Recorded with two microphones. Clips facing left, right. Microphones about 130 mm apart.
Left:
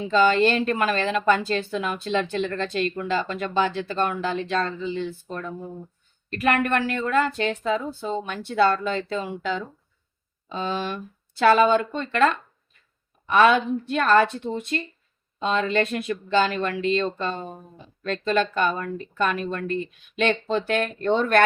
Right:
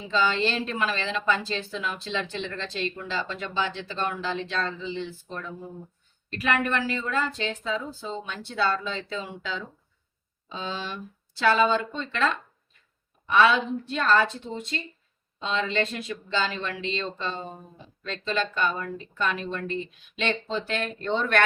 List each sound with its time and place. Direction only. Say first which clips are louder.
0.1 s a woman's voice: left 6 dB; 50° left (ahead or behind)